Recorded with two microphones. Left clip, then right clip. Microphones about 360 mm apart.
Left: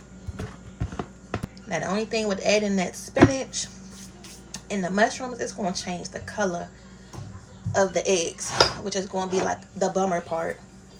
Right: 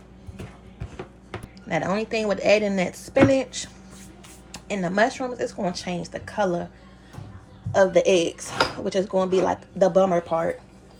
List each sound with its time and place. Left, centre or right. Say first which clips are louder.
1.7 s speech: right 2 dB; right
7.7 s speech: right 5 dB; right